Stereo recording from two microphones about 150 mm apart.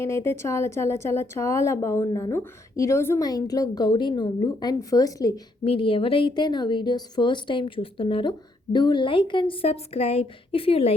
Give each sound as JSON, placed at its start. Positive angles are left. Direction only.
{"t": 0.0, "sound": "a woman's voice", "side_deg": 20}
{"t": 5.6, "sound": "a woman's voice", "side_deg": 35}